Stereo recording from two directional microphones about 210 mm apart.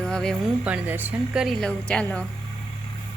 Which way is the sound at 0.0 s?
5° left (ahead or behind).